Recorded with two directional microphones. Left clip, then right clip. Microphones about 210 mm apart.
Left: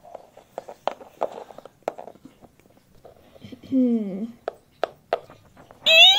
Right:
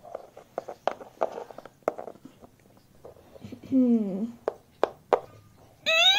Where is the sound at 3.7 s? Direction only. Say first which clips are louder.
Left 2 dB; 10° left (ahead or behind).